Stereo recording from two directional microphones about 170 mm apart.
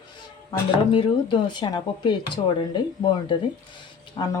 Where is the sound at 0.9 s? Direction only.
30° left (ahead or behind).